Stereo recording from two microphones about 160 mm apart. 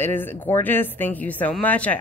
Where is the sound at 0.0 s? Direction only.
10° left (ahead or behind).